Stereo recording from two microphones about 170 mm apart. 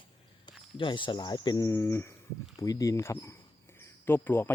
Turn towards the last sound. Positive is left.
turn(degrees=15)  # may be behind; listen again after turning